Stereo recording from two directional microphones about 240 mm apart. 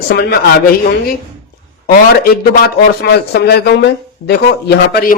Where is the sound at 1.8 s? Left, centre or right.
Left.